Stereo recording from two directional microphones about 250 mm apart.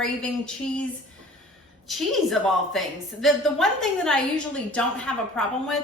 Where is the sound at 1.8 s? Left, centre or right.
Centre.